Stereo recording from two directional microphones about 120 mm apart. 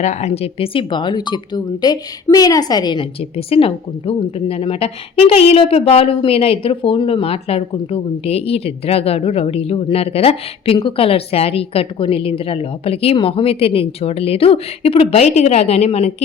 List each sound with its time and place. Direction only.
0.0 s a woman's voice: 70° left (ahead or behind); by 3.1 s 35° left (ahead or behind)
3.3 s a woman's voice: 55° left (ahead or behind)